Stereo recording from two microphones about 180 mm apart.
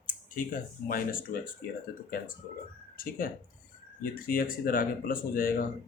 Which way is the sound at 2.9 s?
50° left (ahead or behind).